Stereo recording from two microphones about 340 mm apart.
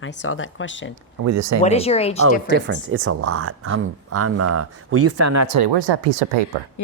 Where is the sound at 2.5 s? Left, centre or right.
Right.